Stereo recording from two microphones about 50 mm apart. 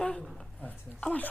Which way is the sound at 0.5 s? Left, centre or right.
Left.